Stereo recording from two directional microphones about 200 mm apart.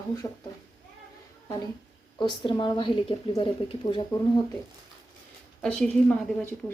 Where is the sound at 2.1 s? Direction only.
25° left (ahead or behind).